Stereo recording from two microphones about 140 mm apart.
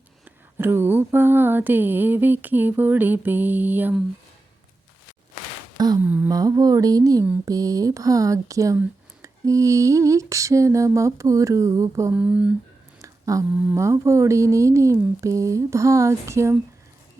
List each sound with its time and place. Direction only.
0.6 s mantra: 15° right (ahead or behind)
5.7 s a sound: 30° right (ahead or behind)
6.0 s mantra: 10° right (ahead or behind)
6.2 s speech: 25° right (ahead or behind)
12.1 s mantra: 10° right (ahead or behind)
13.0 s a sound: 25° right (ahead or behind)
13.6 s speech: 15° right (ahead or behind)